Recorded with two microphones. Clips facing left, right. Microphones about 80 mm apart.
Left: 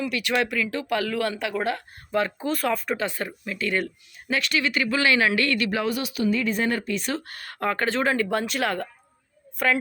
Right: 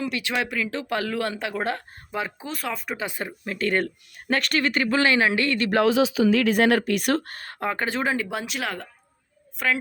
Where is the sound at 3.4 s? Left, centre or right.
Right.